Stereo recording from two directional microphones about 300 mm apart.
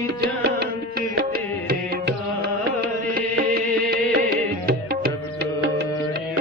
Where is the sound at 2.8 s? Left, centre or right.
Right.